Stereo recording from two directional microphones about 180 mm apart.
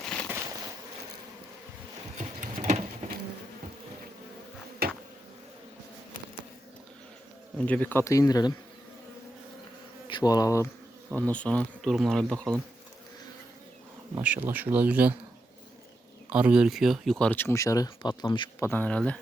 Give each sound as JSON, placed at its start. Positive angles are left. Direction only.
{"t": 0.0, "sound": "a sound", "side_deg": 5}
{"t": 0.3, "sound": "a sound", "side_deg": -15}
{"t": 2.1, "sound": "patter", "side_deg": -45}
{"t": 4.8, "sound": "a sound", "side_deg": -60}
{"t": 7.6, "sound": "speech", "side_deg": 10}
{"t": 10.1, "sound": "bee", "side_deg": 20}
{"t": 11.1, "sound": "speech", "side_deg": 5}
{"t": 14.2, "sound": "speech", "side_deg": -10}
{"t": 16.3, "sound": "speech", "side_deg": -5}